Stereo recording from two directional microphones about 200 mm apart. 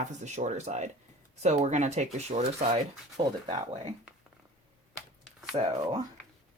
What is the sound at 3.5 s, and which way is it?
Speech, 30° right (ahead or behind).